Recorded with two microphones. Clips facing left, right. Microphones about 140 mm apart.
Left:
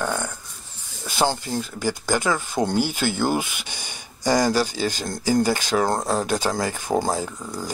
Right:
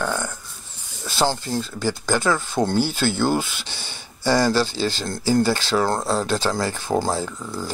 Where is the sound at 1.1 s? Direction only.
15° left (ahead or behind).